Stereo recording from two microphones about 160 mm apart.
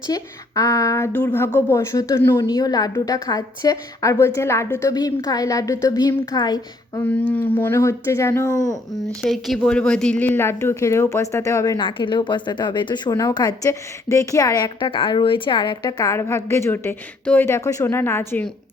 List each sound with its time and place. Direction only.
0.1 s a woman's voice: 20° left (ahead or behind)
7.0 s speech: 10° left (ahead or behind)
9.2 s a woman's voice: centre (ahead or behind)